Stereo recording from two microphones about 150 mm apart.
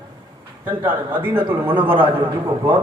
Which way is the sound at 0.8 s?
15° right (ahead or behind).